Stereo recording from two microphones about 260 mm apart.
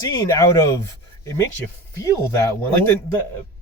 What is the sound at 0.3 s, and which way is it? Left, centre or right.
Speech, centre.